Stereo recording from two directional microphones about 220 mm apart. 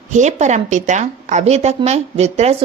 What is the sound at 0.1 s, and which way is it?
A woman's voice, 30° right (ahead or behind).